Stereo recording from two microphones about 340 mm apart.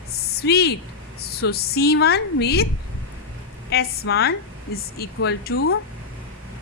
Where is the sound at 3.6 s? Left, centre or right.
Left.